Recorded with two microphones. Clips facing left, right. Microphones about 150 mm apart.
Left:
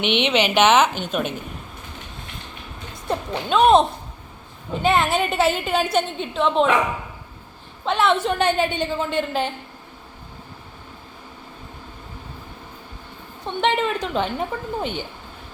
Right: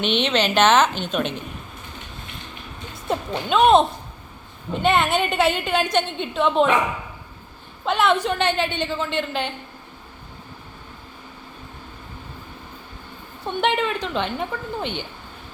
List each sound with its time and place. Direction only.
0.0 s a woman's voice: 15° left (ahead or behind)
3.3 s a woman's voice: centre (ahead or behind)
7.9 s a woman's voice: centre (ahead or behind)
8.4 s a woman's voice: 40° left (ahead or behind)
8.8 s a woman's voice: 10° left (ahead or behind)
9.1 s a woman's voice: 40° left (ahead or behind)
13.4 s a woman's voice: 5° right (ahead or behind)